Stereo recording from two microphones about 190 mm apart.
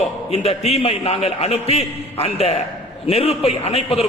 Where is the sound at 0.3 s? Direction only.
35° left (ahead or behind).